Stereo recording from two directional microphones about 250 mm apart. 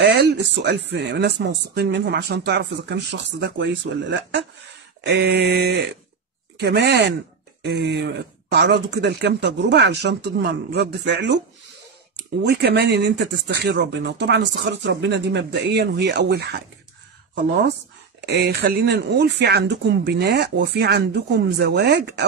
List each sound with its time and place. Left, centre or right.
0.0 s speech: right
12.6 s speech: right
18.2 s speech: right